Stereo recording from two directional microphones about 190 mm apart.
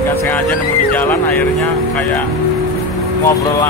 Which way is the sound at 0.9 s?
10° left (ahead or behind).